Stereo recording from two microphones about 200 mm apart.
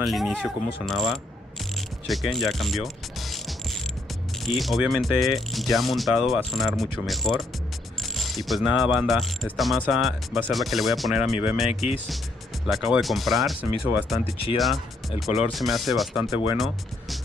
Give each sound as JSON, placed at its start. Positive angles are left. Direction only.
{"t": 0.0, "sound": "speech", "side_deg": 0}
{"t": 12.6, "sound": "speech", "side_deg": 0}